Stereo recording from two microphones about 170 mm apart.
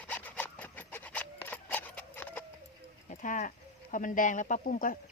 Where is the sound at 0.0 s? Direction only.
10° left (ahead or behind).